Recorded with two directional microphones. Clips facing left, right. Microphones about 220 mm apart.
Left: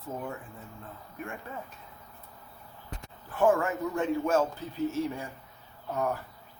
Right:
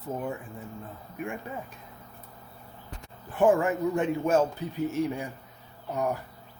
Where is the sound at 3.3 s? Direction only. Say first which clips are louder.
Right 3 dB; 15° right (ahead or behind).